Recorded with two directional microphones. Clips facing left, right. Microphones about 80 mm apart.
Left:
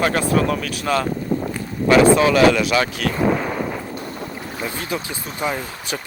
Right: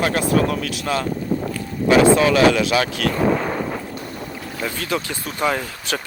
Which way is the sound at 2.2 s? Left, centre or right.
Left.